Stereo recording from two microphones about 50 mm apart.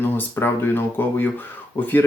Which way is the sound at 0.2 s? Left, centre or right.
Left.